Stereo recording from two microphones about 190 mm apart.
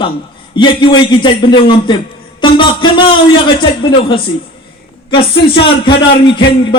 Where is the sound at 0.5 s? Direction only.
25° left (ahead or behind).